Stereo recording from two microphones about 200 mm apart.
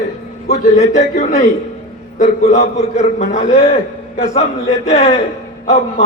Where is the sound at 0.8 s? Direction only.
35° left (ahead or behind).